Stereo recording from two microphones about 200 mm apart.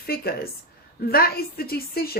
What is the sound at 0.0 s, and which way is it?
Speech, 50° left (ahead or behind).